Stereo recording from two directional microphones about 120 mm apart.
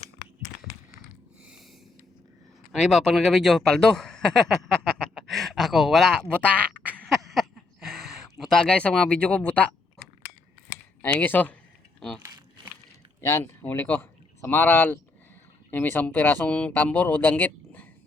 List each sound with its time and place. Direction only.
2.7 s speech: 5° left (ahead or behind)
7.0 s a sound: centre (ahead or behind)
11.0 s speech: 15° left (ahead or behind)
13.2 s speech: 20° left (ahead or behind)